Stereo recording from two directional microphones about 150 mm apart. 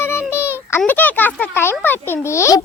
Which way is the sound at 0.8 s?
10° left (ahead or behind).